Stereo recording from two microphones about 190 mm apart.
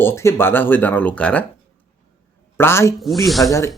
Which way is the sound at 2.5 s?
15° left (ahead or behind).